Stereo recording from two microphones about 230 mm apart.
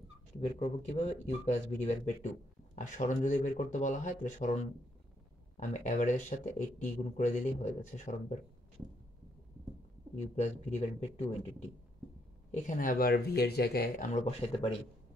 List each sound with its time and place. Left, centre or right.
0.4 s speech: left
10.1 s speech: left
12.4 s speech: left